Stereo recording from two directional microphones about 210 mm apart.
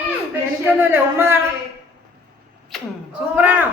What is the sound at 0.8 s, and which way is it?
Speech, 10° right (ahead or behind).